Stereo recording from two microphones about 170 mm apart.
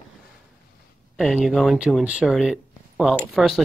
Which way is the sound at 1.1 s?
Centre (ahead or behind).